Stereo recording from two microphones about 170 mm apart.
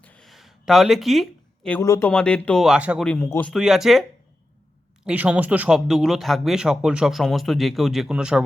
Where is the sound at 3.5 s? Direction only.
Centre (ahead or behind).